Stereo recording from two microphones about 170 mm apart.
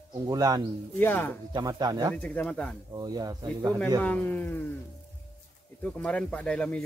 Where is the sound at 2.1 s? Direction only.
10° left (ahead or behind).